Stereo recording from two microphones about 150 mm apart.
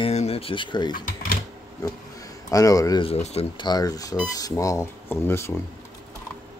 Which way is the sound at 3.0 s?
45° left (ahead or behind).